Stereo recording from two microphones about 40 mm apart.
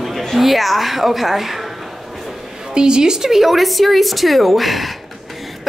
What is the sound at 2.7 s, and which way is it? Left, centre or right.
Speech, right.